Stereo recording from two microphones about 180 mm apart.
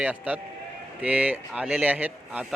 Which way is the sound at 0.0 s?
10° right (ahead or behind).